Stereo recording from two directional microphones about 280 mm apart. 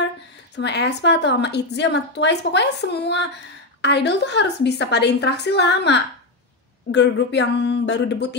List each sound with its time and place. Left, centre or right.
0.6 s a woman's voice: left